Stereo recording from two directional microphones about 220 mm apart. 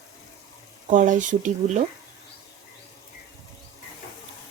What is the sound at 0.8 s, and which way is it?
Speech, 35° right (ahead or behind).